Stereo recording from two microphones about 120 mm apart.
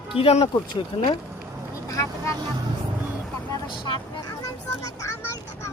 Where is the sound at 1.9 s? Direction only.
25° left (ahead or behind).